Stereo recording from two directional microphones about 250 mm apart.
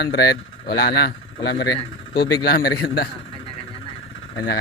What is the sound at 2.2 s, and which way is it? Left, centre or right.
Speech, centre.